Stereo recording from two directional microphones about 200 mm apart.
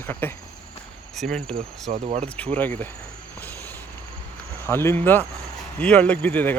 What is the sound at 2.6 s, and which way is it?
Speech, 10° left (ahead or behind).